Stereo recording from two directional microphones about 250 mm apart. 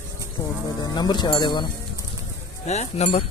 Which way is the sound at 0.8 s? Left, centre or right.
Centre.